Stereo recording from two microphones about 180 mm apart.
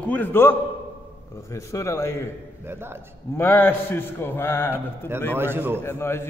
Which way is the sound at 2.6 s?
15° right (ahead or behind).